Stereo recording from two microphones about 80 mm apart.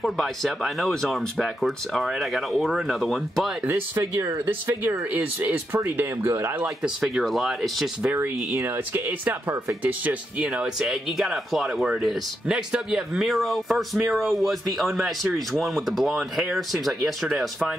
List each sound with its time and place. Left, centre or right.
0.0 s speech: centre
3.6 s speech: right
4.0 s speech: right
4.5 s speech: right
6.6 s speech: centre
7.2 s speech: centre
8.0 s speech: right; by 17.7 s centre